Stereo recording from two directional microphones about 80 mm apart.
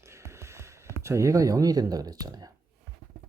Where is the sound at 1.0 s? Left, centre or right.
Right.